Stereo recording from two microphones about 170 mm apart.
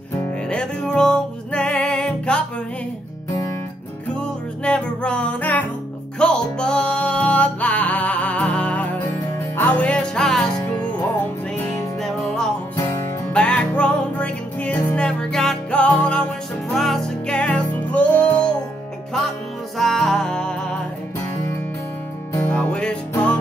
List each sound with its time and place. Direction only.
0.5 s music: 5° left (ahead or behind)
4.1 s music: 5° left (ahead or behind)
19.8 s music: centre (ahead or behind)
22.3 s music: 10° left (ahead or behind)